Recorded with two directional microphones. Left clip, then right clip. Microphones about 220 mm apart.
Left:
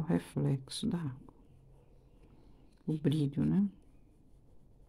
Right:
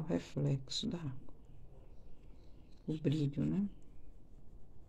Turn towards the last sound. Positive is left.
turn(degrees=25)  # may be behind; listen again after turning